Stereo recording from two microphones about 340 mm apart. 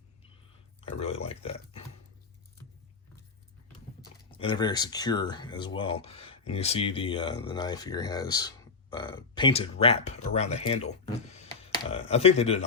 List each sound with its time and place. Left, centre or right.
0.8 s speech: centre
4.4 s speech: centre